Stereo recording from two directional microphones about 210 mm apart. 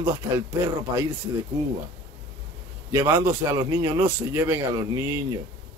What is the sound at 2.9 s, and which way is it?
A man's voice, 15° right (ahead or behind).